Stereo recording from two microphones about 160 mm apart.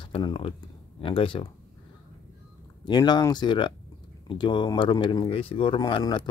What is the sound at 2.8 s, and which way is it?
Speech, 25° left (ahead or behind).